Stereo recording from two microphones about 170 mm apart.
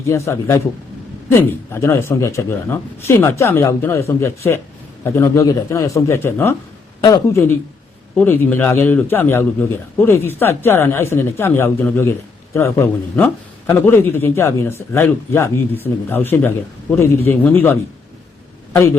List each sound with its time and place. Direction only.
0.0 s a man's voice: 15° left (ahead or behind)